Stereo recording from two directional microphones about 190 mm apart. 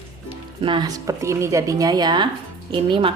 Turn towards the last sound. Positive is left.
turn(degrees=-25)  # may be behind; listen again after turning